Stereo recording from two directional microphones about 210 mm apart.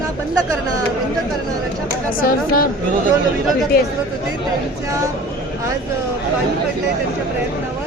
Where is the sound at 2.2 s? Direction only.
45° left (ahead or behind).